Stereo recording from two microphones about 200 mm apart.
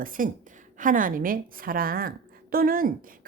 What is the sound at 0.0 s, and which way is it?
A woman's voice, 40° right (ahead or behind).